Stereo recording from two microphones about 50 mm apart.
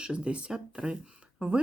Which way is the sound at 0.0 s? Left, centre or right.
Right.